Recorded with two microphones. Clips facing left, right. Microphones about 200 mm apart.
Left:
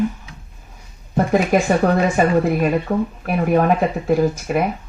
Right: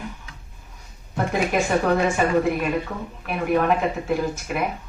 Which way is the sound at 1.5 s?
40° left (ahead or behind).